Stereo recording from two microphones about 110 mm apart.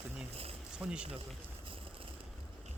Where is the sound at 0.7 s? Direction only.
10° right (ahead or behind).